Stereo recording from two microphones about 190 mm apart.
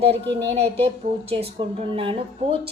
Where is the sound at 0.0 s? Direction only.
30° right (ahead or behind).